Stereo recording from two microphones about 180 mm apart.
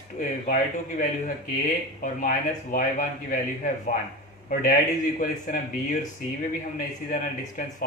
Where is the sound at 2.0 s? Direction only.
50° left (ahead or behind).